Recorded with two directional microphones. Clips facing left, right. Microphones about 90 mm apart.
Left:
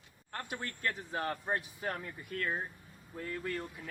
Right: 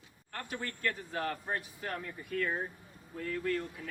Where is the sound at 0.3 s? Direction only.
20° left (ahead or behind).